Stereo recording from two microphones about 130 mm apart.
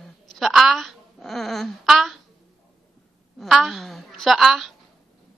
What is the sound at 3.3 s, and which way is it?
A woman's voice, centre (ahead or behind).